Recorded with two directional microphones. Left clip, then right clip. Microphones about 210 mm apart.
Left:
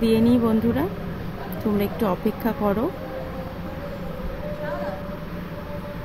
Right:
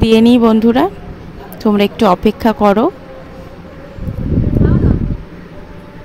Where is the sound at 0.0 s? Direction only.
45° right (ahead or behind).